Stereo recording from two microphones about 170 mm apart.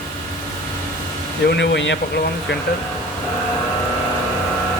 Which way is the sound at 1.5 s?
85° left.